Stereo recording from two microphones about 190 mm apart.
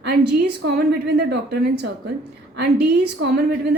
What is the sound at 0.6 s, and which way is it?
A woman's voice, 55° right (ahead or behind).